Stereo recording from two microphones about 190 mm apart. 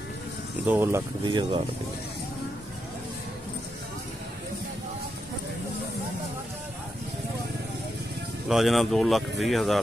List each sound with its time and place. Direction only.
0.7 s speech: 10° right (ahead or behind)
1.2 s speech: 25° right (ahead or behind)
8.5 s speech: centre (ahead or behind)